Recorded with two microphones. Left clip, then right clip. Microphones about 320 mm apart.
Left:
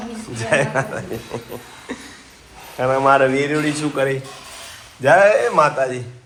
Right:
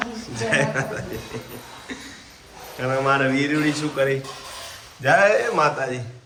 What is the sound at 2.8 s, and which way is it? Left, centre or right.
A man's voice, centre.